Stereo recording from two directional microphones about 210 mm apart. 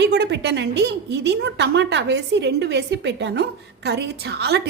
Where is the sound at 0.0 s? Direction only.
55° right (ahead or behind).